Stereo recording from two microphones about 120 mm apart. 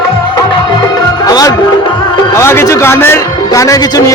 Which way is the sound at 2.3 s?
20° left (ahead or behind).